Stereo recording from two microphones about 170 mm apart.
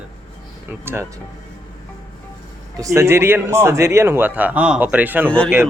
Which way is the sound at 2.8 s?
15° right (ahead or behind).